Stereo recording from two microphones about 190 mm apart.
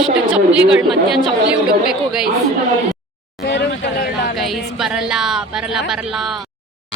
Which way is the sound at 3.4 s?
70° left (ahead or behind).